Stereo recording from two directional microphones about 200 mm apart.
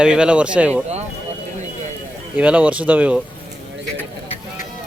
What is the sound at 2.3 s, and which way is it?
Speech, 5° right (ahead or behind).